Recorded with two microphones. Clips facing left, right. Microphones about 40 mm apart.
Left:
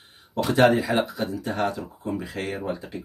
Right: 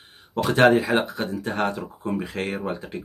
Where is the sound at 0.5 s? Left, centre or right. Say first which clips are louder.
Right 2 dB; right.